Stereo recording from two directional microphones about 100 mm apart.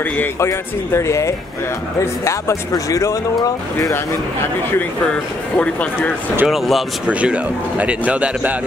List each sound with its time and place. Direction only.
0.0 s speech: 20° left (ahead or behind)
0.5 s speech: 30° left (ahead or behind)
5.0 s speech: 10° left (ahead or behind)
6.4 s speech: centre (ahead or behind)
7.1 s speech: 10° right (ahead or behind)